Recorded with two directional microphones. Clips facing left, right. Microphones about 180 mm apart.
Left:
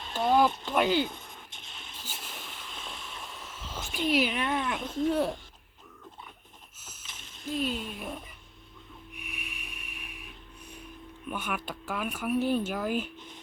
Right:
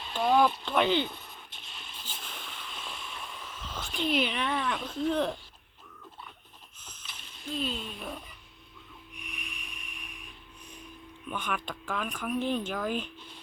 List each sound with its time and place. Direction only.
0.3 s speech: 10° left (ahead or behind)
1.1 s a sound: 20° left (ahead or behind)
2.0 s a sound: 10° left (ahead or behind)
3.4 s cat: 10° left (ahead or behind)
5.0 s speech: 10° left (ahead or behind)
7.5 s speech: 10° left (ahead or behind)
9.1 s snort: 5° left (ahead or behind)
11.3 s speech: 5° left (ahead or behind)
13.1 s music: 20° left (ahead or behind)